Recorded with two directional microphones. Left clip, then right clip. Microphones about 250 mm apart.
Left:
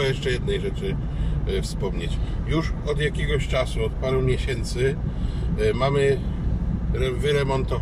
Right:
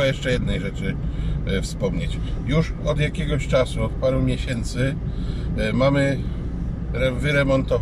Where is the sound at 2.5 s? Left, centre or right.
Centre.